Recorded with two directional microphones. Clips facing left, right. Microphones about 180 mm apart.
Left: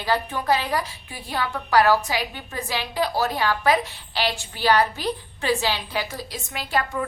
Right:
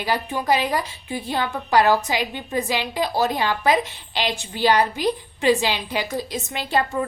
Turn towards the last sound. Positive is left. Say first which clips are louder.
# right 3 dB
turn(degrees=-25)  # may be behind; listen again after turning